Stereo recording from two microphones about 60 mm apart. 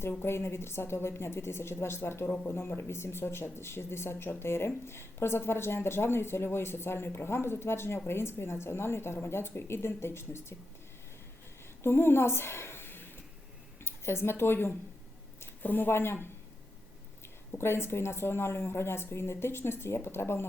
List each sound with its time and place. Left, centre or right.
0.2 s speech: left
11.8 s a woman's voice: left
17.5 s speech: left